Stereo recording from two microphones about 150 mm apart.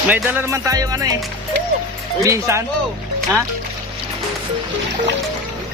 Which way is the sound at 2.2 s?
20° right (ahead or behind).